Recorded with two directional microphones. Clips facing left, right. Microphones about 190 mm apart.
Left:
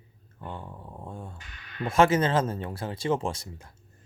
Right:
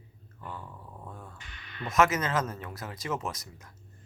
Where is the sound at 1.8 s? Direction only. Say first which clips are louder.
Left 4 dB; 30° left (ahead or behind).